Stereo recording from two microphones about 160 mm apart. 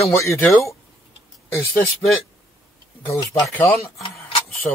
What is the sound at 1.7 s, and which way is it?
Speech, 5° left (ahead or behind).